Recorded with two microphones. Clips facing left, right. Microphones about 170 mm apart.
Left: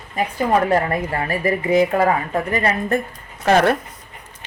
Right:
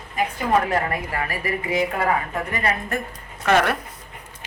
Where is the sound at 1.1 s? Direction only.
30° left (ahead or behind).